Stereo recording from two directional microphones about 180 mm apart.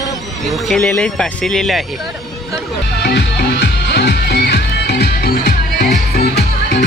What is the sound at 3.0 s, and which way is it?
Music, 65° left (ahead or behind).